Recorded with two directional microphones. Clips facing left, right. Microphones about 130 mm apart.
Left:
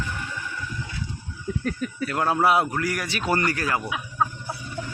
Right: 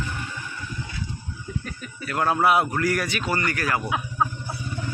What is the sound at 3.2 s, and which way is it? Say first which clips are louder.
Speech: left 2 dB; 45° left (ahead or behind).